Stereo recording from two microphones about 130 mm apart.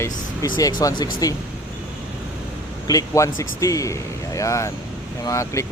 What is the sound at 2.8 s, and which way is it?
Speech, 25° left (ahead or behind).